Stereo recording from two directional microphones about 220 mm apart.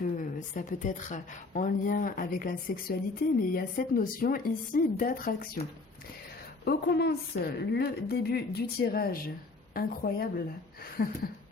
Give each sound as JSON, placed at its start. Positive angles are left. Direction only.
{"t": 0.0, "sound": "a woman's voice", "side_deg": 35}
{"t": 6.7, "sound": "a woman's voice", "side_deg": 45}